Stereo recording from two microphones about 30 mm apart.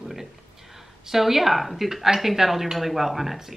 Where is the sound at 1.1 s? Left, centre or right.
Centre.